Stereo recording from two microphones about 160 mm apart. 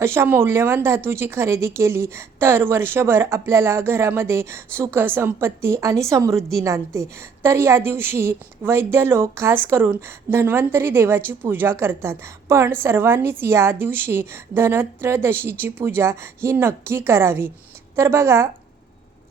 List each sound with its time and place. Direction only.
0.0 s speech: 15° right (ahead or behind)